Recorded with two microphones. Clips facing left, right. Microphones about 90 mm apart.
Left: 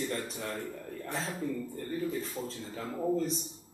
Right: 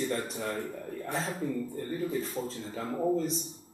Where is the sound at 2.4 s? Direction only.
25° right (ahead or behind).